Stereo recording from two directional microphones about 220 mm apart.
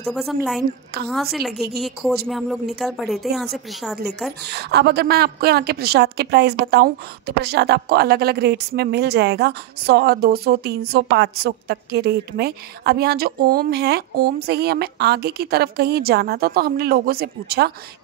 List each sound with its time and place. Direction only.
0.1 s speech: centre (ahead or behind)
4.5 s a woman's voice: 50° right (ahead or behind)